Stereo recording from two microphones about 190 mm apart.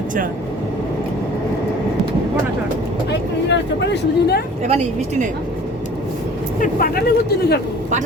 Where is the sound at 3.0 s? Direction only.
65° left (ahead or behind).